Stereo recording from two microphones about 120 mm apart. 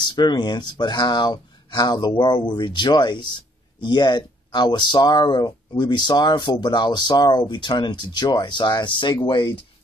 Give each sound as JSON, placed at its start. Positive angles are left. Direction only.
{"t": 0.0, "sound": "speech", "side_deg": 40}